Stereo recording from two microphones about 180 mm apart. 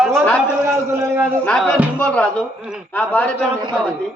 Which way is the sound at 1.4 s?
5° left (ahead or behind).